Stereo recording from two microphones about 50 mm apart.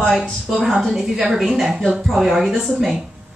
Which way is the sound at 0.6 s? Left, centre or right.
Centre.